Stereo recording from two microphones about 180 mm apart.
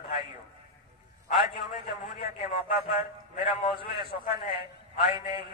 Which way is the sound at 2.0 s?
35° left (ahead or behind).